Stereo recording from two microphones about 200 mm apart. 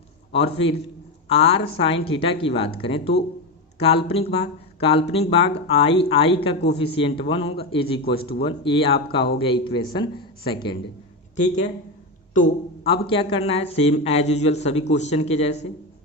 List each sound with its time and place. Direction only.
0.3 s speech: 30° left (ahead or behind)
12.3 s a man's voice: 40° left (ahead or behind)
12.9 s speech: 25° left (ahead or behind)